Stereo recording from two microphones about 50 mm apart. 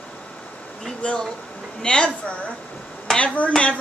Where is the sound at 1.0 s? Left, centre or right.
Left.